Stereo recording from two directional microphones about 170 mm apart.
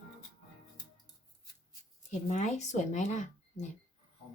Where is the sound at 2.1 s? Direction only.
45° left (ahead or behind).